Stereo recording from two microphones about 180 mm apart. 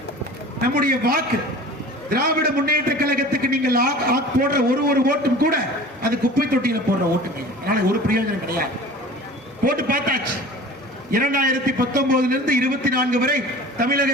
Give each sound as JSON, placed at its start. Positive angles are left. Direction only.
{"t": 0.6, "sound": "a man's voice", "side_deg": -55}
{"t": 9.6, "sound": "a man's voice", "side_deg": -55}